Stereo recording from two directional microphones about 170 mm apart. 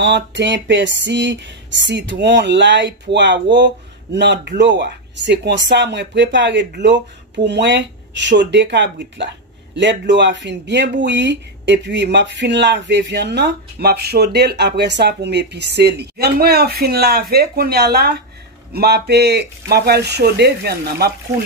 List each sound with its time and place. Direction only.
0.0 s speech: 90° right; by 21.1 s 70° right (ahead or behind)